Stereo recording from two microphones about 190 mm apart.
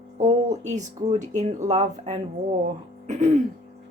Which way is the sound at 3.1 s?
40° right (ahead or behind).